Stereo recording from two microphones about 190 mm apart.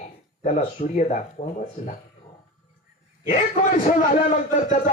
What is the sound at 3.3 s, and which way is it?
A man's voice, 40° left (ahead or behind).